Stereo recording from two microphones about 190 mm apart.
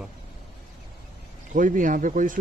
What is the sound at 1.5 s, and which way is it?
Speech, 45° right (ahead or behind).